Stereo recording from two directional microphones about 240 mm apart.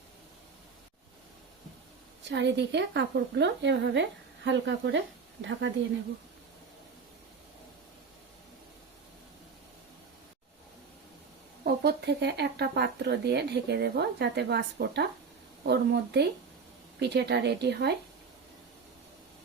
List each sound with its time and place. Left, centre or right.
2.3 s speech: right
11.6 s speech: right